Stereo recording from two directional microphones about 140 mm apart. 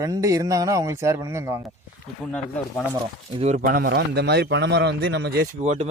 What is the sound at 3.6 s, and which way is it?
Speech, 90° right.